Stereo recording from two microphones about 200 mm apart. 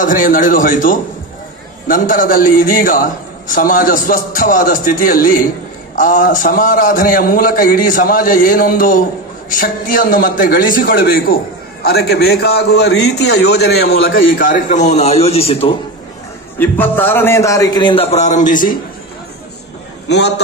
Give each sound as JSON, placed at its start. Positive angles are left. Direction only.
{"t": 0.0, "sound": "a man's voice", "side_deg": 45}
{"t": 14.4, "sound": "a man's voice", "side_deg": 40}
{"t": 16.5, "sound": "a man's voice", "side_deg": 10}
{"t": 20.1, "sound": "a man's voice", "side_deg": 60}